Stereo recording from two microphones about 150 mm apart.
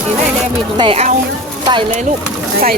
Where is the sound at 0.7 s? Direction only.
40° right (ahead or behind).